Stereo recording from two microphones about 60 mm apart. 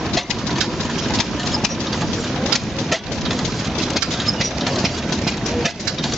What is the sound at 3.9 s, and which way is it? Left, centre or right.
Engine, centre.